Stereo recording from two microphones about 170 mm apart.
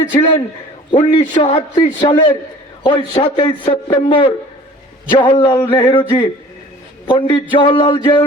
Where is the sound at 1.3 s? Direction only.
30° left (ahead or behind).